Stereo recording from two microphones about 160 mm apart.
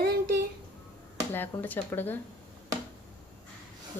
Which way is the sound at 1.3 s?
10° left (ahead or behind).